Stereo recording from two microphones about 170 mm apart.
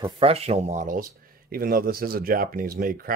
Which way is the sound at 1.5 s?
60° right (ahead or behind).